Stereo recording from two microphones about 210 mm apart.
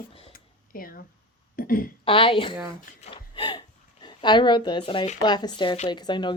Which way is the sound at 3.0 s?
25° left (ahead or behind).